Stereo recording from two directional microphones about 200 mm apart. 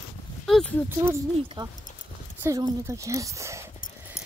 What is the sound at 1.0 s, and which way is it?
Speech, 15° right (ahead or behind).